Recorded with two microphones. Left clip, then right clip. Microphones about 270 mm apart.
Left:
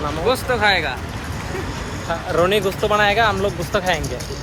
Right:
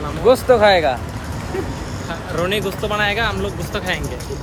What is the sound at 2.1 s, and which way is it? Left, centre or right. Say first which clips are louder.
Speech: left 4 dB; centre.